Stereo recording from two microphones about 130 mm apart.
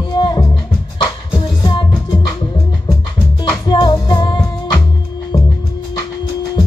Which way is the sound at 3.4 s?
35° left (ahead or behind).